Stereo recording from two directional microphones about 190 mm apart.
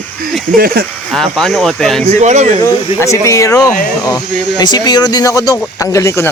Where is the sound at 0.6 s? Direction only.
55° right (ahead or behind).